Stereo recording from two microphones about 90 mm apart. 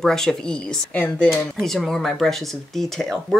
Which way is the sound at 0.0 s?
5° left (ahead or behind).